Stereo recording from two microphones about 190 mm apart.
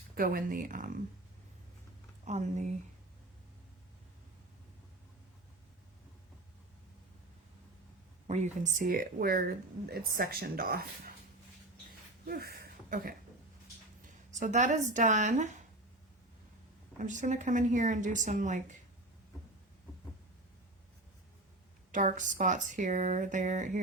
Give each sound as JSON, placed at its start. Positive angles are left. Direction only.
{"t": 0.2, "sound": "speech", "side_deg": -50}
{"t": 2.2, "sound": "speech", "side_deg": -40}
{"t": 8.3, "sound": "speech", "side_deg": -40}
{"t": 12.3, "sound": "a sound", "side_deg": -55}
{"t": 14.1, "sound": "speech", "side_deg": -40}
{"t": 17.0, "sound": "speech", "side_deg": -40}
{"t": 21.9, "sound": "speech", "side_deg": -40}